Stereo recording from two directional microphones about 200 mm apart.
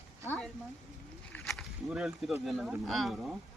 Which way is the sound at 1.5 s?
5° right (ahead or behind).